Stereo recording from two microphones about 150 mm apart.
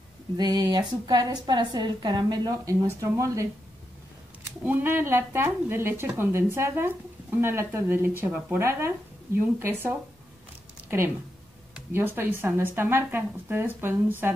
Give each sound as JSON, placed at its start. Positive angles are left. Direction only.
{"t": 0.4, "sound": "a woman's voice", "side_deg": -25}
{"t": 4.6, "sound": "a woman's voice", "side_deg": -15}
{"t": 11.7, "sound": "a woman's voice", "side_deg": -15}